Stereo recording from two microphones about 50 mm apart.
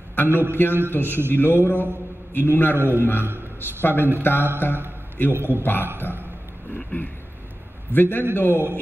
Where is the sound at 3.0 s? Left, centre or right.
Left.